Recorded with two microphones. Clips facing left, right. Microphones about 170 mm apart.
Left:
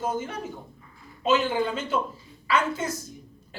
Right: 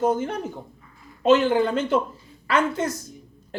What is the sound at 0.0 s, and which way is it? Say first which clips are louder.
Speech: right 7 dB; 55° right (ahead or behind).